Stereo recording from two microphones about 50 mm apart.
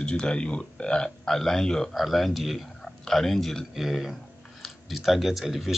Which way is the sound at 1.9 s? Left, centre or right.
Centre.